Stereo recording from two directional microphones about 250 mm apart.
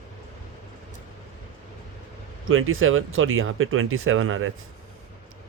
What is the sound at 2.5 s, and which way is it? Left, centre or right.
Speech, right.